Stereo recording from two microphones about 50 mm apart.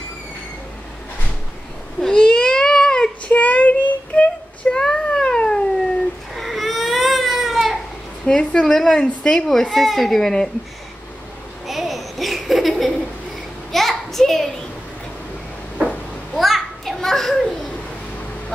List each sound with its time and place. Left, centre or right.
2.0 s a sound: centre
3.3 s child singing: left
6.3 s baby cry: centre
8.4 s a woman's voice: centre
9.5 s a woman's voice: centre
11.6 s a sound: centre
16.3 s children playing: centre